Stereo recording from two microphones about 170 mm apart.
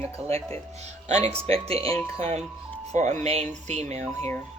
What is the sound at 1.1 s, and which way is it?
Speech, 40° right (ahead or behind).